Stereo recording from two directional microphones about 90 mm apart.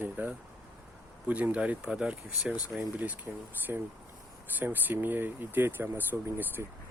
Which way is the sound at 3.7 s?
20° right (ahead or behind).